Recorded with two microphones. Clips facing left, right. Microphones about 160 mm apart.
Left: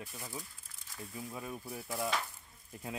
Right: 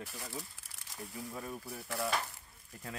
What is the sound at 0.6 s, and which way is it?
Crumpling, 75° right (ahead or behind).